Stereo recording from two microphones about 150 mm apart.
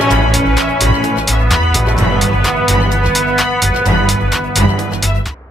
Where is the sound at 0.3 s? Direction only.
Centre (ahead or behind).